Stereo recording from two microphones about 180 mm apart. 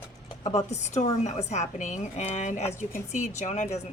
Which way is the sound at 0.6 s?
40° left (ahead or behind).